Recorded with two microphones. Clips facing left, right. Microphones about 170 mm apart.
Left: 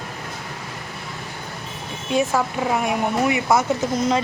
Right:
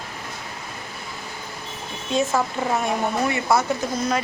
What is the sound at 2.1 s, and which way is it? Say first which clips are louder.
Speech: left 1 dB; 15° left (ahead or behind).